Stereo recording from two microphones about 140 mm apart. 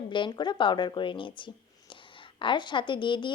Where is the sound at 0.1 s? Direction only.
35° left (ahead or behind).